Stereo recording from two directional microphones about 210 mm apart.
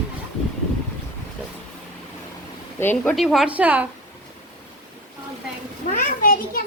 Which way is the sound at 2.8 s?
5° left (ahead or behind).